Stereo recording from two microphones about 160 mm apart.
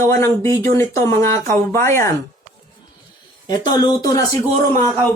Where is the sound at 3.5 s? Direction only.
25° left (ahead or behind).